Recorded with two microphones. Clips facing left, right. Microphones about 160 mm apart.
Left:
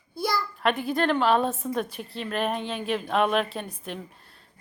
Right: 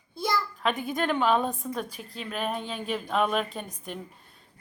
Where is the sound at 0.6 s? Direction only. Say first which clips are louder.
Left 3 dB; 5° right (ahead or behind).